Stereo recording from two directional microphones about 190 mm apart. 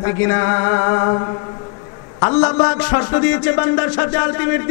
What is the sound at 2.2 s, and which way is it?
A man's voice, 15° left (ahead or behind).